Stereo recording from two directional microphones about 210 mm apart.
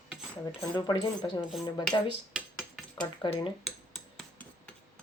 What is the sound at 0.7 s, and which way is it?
Speech, 20° left (ahead or behind).